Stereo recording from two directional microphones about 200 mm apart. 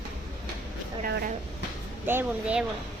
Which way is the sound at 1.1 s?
55° right (ahead or behind).